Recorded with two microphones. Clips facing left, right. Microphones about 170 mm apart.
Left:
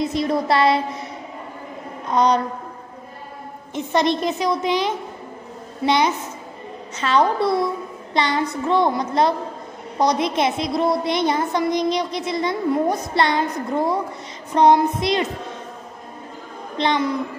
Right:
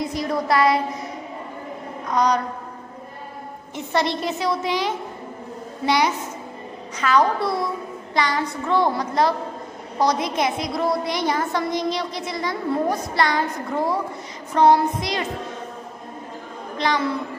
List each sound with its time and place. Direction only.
0.0 s a woman's voice: 25° left (ahead or behind)
2.0 s a sound: 25° left (ahead or behind)
3.7 s a woman's voice: 20° left (ahead or behind)
14.5 s a woman's voice: 20° left (ahead or behind)
16.7 s a woman's voice: 25° left (ahead or behind)